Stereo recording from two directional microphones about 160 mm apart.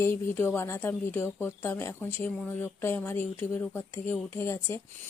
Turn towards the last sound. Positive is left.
turn(degrees=15)  # may be behind; listen again after turning